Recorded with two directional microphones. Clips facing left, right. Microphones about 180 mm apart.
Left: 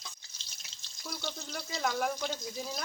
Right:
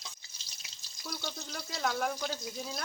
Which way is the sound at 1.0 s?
Centre (ahead or behind).